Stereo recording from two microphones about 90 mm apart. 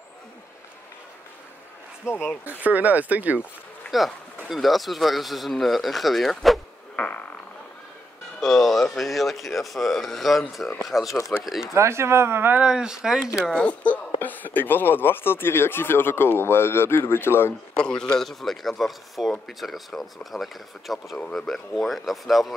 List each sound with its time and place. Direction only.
2.0 s speech: 25° left (ahead or behind)
2.6 s speech: 15° right (ahead or behind)
3.9 s speech: centre (ahead or behind)
7.0 s a sound: 15° left (ahead or behind)
8.4 s speech: centre (ahead or behind)
11.1 s speech: 30° left (ahead or behind)
11.4 s speech: 5° right (ahead or behind)
11.7 s speech: 30° right (ahead or behind)
12.5 s speech: 10° right (ahead or behind)
13.5 s speech: 10° left (ahead or behind)
17.7 s speech: 10° left (ahead or behind)